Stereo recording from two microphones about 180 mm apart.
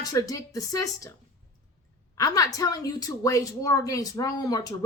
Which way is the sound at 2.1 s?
20° left (ahead or behind).